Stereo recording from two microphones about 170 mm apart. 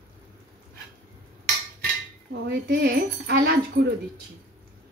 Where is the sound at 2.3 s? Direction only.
75° right (ahead or behind).